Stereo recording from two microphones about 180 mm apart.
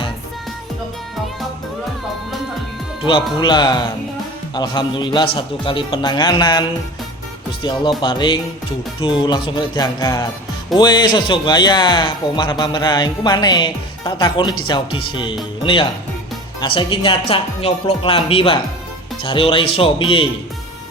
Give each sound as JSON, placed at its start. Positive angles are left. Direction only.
{"t": 3.0, "sound": "speech", "side_deg": 30}